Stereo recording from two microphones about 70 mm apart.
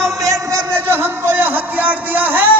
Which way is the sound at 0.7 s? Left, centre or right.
Right.